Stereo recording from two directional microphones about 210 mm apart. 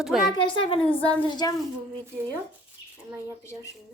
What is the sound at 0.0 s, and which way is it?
Speech, centre (ahead or behind).